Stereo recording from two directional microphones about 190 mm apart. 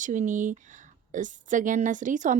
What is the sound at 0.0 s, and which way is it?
A woman's voice, 40° right (ahead or behind).